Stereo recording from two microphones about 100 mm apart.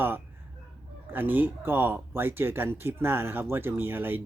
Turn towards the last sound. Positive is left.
turn(degrees=-20)  # may be behind; listen again after turning